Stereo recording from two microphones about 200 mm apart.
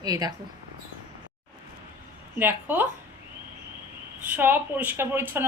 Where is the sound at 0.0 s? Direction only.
20° right (ahead or behind).